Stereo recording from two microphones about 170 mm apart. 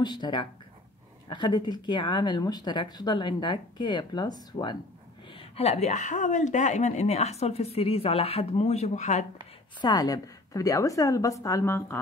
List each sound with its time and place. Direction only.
0.0 s speech: 25° left (ahead or behind)
5.6 s speech: 40° left (ahead or behind)
9.8 s speech: 25° left (ahead or behind)